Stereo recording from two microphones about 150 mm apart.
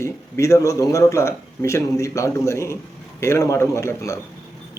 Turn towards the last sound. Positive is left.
turn(degrees=20)  # may be behind; listen again after turning